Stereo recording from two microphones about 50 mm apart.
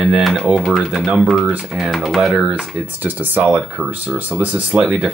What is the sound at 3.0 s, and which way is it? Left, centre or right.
Speech, right.